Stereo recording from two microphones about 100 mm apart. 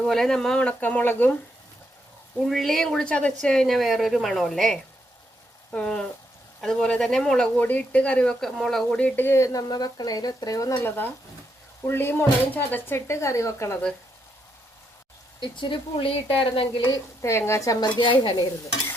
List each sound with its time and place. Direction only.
0.0 s speech: 5° left (ahead or behind)
2.4 s speech: 5° left (ahead or behind)
9.0 s speech: 15° left (ahead or behind); by 10.8 s 35° left (ahead or behind)
10.8 s speech: 20° left (ahead or behind)
15.4 s speech: 55° left (ahead or behind)
17.2 s speech: 25° left (ahead or behind)
17.8 s speech: 50° left (ahead or behind)